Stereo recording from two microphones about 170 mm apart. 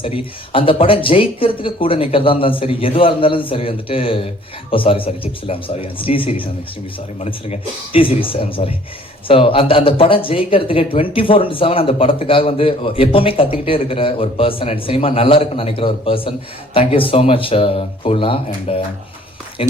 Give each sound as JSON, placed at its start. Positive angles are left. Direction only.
{"t": 0.0, "sound": "speech", "side_deg": 30}